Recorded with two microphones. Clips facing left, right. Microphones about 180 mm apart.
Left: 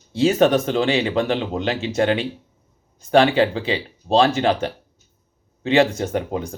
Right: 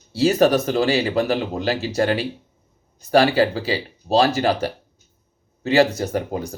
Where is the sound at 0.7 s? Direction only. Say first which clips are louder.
Even; 40° right (ahead or behind).